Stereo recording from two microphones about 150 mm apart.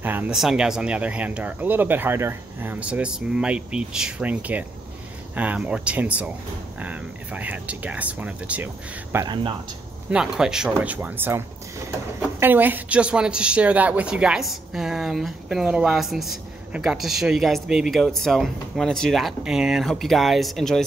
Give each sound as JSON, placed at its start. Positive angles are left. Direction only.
{"t": 0.0, "sound": "speech", "side_deg": -10}
{"t": 9.1, "sound": "speech", "side_deg": -30}
{"t": 10.1, "sound": "a woman's voice", "side_deg": -5}